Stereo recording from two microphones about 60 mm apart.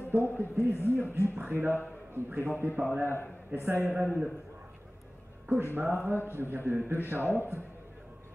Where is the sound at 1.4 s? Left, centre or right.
Right.